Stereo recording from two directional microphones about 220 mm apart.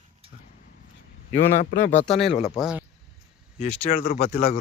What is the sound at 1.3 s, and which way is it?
Speech, 35° left (ahead or behind).